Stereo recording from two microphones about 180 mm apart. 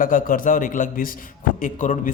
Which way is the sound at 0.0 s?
50° left (ahead or behind).